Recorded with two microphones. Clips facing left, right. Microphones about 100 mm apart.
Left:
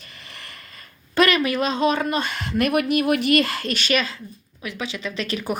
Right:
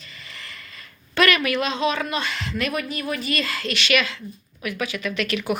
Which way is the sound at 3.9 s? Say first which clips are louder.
Right 1 dB; 35° left (ahead or behind).